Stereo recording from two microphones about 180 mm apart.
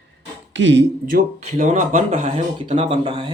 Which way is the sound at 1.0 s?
50° right (ahead or behind).